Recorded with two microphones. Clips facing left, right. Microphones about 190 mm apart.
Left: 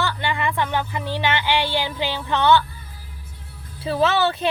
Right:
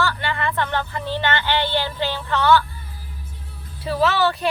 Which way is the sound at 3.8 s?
25° left (ahead or behind).